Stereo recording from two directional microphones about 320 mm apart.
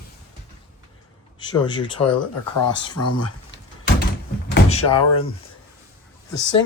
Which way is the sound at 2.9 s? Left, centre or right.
Left.